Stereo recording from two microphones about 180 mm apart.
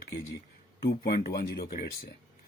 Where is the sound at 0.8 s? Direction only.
55° left (ahead or behind).